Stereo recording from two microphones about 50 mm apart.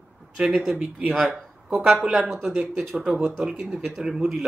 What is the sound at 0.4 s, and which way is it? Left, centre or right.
Speech, centre.